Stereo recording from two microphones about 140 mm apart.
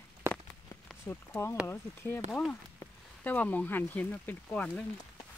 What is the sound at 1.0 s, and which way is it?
Speech, 15° left (ahead or behind).